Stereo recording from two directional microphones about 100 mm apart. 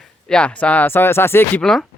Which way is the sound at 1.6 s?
5° left (ahead or behind).